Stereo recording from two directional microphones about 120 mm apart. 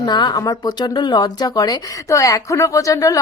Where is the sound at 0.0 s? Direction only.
40° left (ahead or behind).